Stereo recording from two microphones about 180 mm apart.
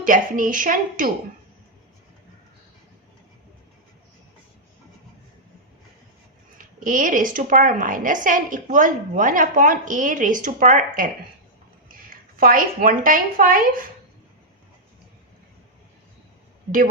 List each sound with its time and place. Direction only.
0.0 s a woman's voice: 50° right (ahead or behind)
6.6 s a woman's voice: 50° right (ahead or behind)
12.1 s a woman's voice: 50° right (ahead or behind)